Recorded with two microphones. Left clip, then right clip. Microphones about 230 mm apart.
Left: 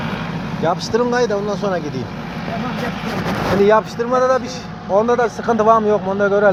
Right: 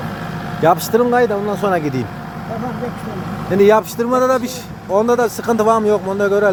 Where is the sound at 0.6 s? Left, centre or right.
Right.